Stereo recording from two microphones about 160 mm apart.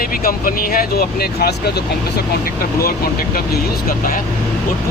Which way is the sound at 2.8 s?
70° left (ahead or behind).